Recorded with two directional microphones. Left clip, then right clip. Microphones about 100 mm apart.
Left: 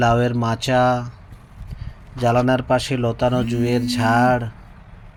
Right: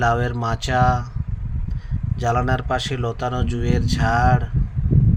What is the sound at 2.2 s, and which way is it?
Speech, 35° left (ahead or behind).